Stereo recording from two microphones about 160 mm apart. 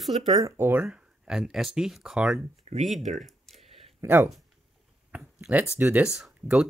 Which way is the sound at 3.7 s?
40° right (ahead or behind).